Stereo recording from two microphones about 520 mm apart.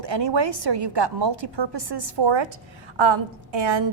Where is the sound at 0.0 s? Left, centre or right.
Right.